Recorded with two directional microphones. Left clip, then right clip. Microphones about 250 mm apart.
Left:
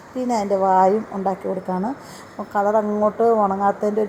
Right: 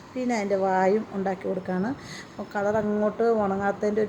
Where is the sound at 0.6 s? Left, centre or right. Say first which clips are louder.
Left 9 dB; centre.